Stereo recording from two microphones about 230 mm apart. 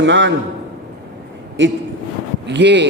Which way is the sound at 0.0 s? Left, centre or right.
Right.